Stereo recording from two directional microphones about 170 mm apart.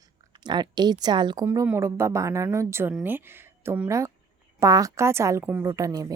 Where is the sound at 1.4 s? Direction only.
15° right (ahead or behind).